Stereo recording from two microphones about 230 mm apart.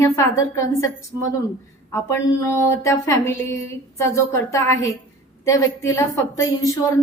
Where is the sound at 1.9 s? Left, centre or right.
Centre.